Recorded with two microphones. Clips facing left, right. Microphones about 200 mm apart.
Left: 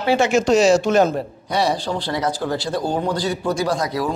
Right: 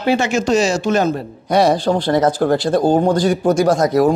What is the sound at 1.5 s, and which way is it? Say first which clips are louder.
Speech: right 7 dB; 50° right (ahead or behind).